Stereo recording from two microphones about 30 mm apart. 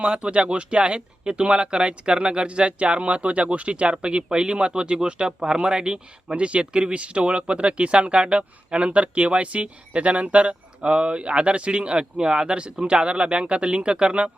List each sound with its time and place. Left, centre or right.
0.0 s speech: right
6.3 s speech: right